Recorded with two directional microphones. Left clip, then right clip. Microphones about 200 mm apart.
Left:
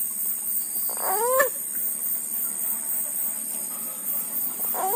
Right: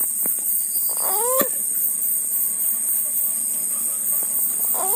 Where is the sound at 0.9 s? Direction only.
Centre (ahead or behind).